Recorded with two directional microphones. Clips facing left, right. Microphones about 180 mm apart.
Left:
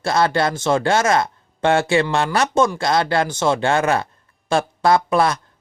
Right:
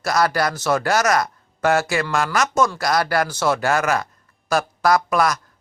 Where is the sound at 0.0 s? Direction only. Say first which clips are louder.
Left 2 dB; 25° left (ahead or behind).